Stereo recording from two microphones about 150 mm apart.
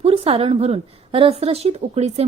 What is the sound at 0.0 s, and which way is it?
A woman's voice, 40° right (ahead or behind).